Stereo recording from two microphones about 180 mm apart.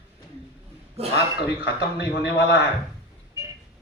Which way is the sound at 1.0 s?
35° right (ahead or behind).